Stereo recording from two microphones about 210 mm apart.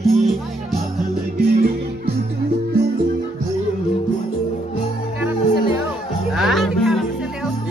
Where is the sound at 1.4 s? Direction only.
45° right (ahead or behind).